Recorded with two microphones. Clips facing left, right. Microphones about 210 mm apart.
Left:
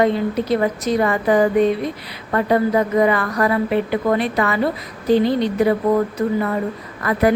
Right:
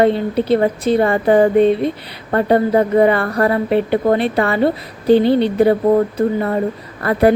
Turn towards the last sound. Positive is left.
turn(degrees=-30)  # may be behind; listen again after turning